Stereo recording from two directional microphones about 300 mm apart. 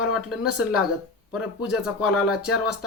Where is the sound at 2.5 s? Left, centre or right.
Left.